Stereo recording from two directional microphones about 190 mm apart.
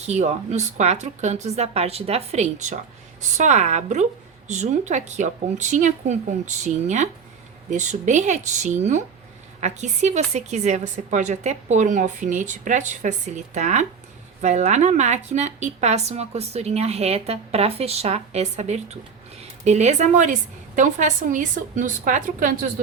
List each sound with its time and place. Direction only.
0.0 s a woman's voice: 35° right (ahead or behind)